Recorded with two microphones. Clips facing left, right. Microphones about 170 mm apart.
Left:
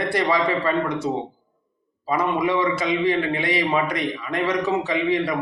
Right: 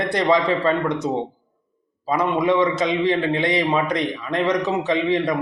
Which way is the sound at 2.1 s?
20° right (ahead or behind).